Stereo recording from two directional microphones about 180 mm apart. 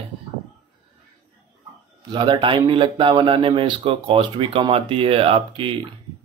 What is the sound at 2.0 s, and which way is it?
Speech, 25° right (ahead or behind).